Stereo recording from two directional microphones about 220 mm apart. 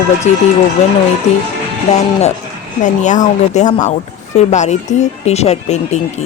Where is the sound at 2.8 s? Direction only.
35° left (ahead or behind).